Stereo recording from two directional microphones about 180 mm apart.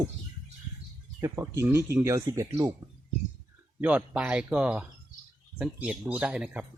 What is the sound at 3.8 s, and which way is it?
Speech, 5° right (ahead or behind).